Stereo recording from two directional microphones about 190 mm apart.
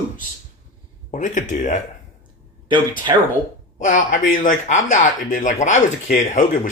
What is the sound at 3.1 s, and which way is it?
Speech, 20° right (ahead or behind).